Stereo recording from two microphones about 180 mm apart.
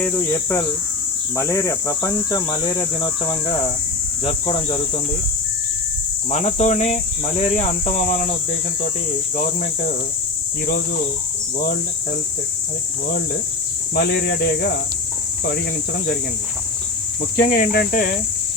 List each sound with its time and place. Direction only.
0.0 s speech: 15° left (ahead or behind); by 4.8 s 30° left (ahead or behind)
6.3 s speech: 40° left (ahead or behind)
9.3 s speech: 45° left (ahead or behind)
13.9 s speech: 65° left (ahead or behind)
17.3 s speech: 50° left (ahead or behind)